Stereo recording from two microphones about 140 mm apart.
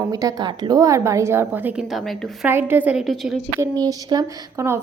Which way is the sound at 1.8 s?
Centre (ahead or behind).